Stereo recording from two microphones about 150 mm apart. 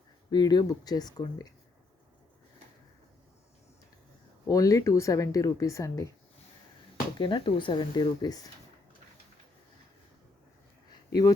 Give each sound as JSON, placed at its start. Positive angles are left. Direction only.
{"t": 0.3, "sound": "a woman's voice", "side_deg": 25}
{"t": 4.4, "sound": "a woman's voice", "side_deg": 20}
{"t": 7.2, "sound": "speech", "side_deg": 35}
{"t": 10.8, "sound": "a sound", "side_deg": 30}